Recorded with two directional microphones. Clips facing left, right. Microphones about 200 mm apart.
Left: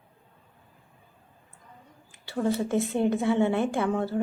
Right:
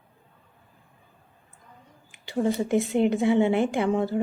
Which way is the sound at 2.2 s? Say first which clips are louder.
Right 2 dB; 15° right (ahead or behind).